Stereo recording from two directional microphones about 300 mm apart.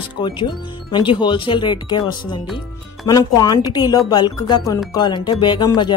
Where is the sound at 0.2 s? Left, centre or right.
Centre.